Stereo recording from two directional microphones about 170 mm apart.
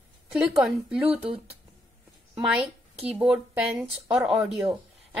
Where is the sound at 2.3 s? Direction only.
5° right (ahead or behind).